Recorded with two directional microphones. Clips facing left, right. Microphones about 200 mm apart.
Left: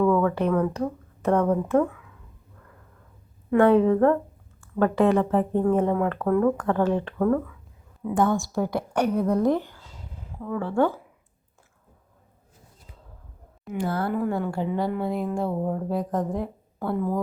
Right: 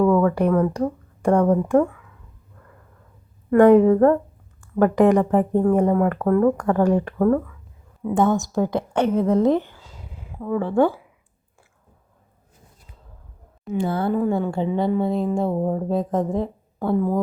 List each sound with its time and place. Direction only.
0.0 s speech: 10° right (ahead or behind)
3.6 s speech: 10° right (ahead or behind)
8.0 s a woman's voice: 25° right (ahead or behind)
13.7 s a woman's voice: 25° right (ahead or behind)